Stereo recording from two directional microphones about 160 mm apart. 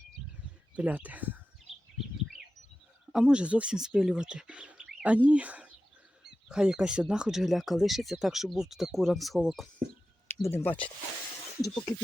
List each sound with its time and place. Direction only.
0.8 s speech: 10° right (ahead or behind)
3.1 s speech: 5° right (ahead or behind)
10.4 s speech: 15° left (ahead or behind)